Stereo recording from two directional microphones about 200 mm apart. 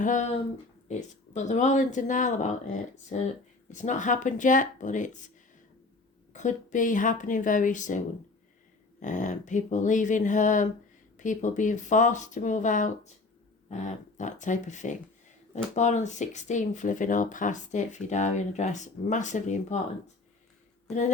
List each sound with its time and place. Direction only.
0.0 s speech: 40° left (ahead or behind)
6.3 s speech: 40° left (ahead or behind)